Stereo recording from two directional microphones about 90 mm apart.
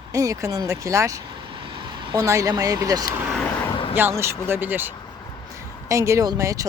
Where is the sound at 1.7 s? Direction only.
60° right (ahead or behind).